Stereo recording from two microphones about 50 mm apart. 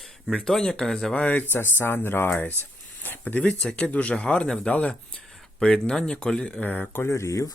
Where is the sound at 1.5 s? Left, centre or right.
Left.